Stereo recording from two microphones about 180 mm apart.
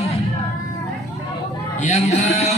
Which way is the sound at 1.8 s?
40° left (ahead or behind).